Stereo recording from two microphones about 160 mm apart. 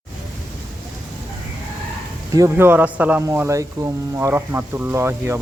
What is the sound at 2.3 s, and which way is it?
A man's voice, 15° right (ahead or behind).